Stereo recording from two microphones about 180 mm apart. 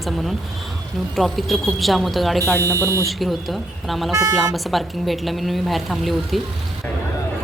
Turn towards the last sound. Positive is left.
turn(degrees=0)  # may be behind; listen again after turning